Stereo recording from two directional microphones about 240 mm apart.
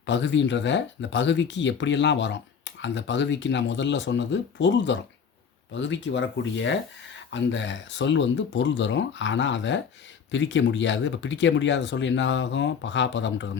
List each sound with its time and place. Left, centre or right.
0.0 s speech: left